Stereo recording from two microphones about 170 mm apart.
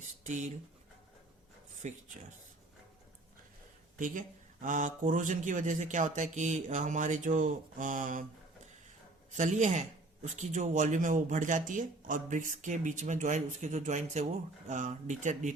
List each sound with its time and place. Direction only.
0.3 s speech: 45° right (ahead or behind)
1.8 s speech: 45° right (ahead or behind)
3.9 s speech: 50° right (ahead or behind)
9.3 s speech: 45° right (ahead or behind)